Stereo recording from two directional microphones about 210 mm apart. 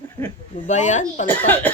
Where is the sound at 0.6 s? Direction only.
35° left (ahead or behind).